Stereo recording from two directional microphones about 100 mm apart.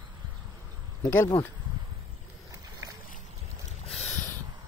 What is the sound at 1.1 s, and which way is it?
Speech, 30° left (ahead or behind).